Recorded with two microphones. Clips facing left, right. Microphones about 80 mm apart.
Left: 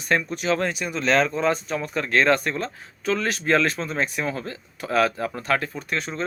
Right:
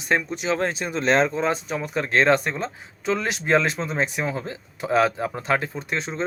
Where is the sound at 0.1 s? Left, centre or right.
Right.